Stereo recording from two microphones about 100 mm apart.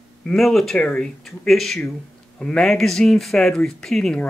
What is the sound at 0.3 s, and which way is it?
Speech, 5° left (ahead or behind).